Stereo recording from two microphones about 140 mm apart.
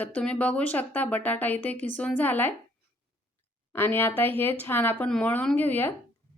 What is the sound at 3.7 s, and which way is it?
Speech, 15° left (ahead or behind).